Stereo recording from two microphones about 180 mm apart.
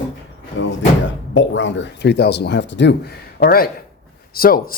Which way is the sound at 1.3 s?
90° left.